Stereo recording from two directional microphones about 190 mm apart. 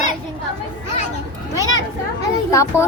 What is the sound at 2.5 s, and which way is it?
Children playing, 15° left (ahead or behind).